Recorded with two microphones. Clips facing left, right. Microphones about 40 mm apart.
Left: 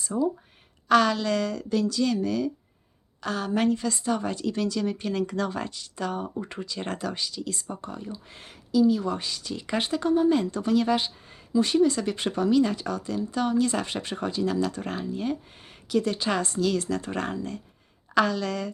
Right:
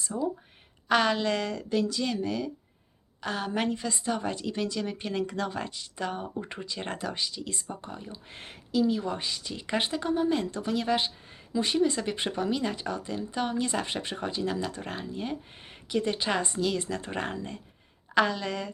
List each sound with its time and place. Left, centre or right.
0.1 s speech: left
0.9 s a woman's voice: right
8.1 s speech: right
9.0 s a woman's voice: centre
15.5 s speech: right